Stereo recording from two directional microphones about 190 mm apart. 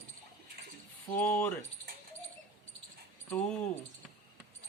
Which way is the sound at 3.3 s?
5° left (ahead or behind).